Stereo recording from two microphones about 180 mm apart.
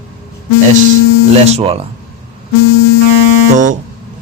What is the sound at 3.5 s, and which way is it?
Speech, 45° right (ahead or behind).